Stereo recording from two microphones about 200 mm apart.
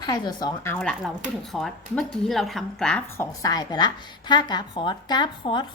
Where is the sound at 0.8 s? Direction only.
Centre (ahead or behind).